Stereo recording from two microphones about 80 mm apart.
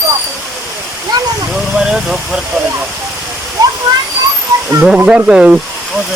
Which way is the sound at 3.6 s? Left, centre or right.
Right.